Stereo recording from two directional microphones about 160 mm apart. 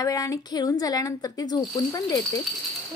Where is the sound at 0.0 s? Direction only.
20° left (ahead or behind).